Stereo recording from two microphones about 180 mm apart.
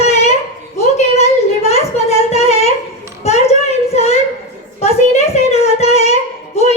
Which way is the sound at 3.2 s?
35° left (ahead or behind).